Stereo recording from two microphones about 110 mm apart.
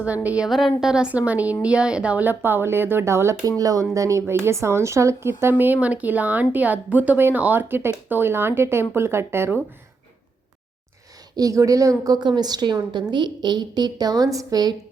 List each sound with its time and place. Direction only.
0.0 s a woman's voice: 15° right (ahead or behind)
11.3 s a woman's voice: 30° right (ahead or behind)